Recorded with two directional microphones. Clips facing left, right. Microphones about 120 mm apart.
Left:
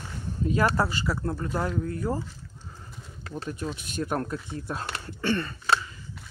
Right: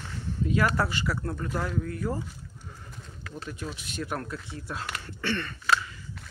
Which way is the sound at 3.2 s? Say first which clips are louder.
Left 4 dB; 35° left (ahead or behind).